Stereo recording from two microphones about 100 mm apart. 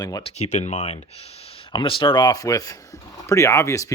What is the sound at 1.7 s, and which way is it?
Speech, 55° left (ahead or behind).